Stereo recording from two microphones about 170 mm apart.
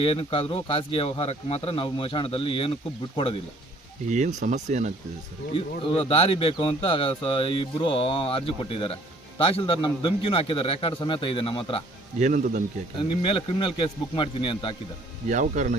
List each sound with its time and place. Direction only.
0.0 s speech: 35° left (ahead or behind)
4.1 s speech: 45° right (ahead or behind)
5.5 s speech: 35° left (ahead or behind)
12.2 s speech: 50° right (ahead or behind)
13.0 s speech: 30° left (ahead or behind)
15.3 s speech: 45° right (ahead or behind)